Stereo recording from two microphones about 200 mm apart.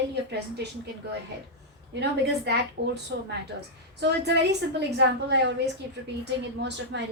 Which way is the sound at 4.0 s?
55° right (ahead or behind).